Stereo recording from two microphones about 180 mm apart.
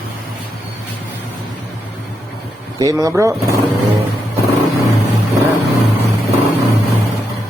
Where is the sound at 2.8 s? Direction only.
20° right (ahead or behind).